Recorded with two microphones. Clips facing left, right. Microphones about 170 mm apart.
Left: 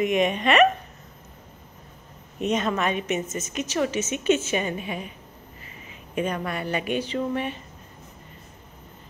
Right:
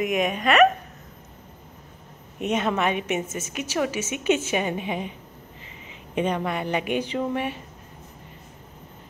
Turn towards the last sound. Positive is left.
turn(degrees=-10)  # may be behind; listen again after turning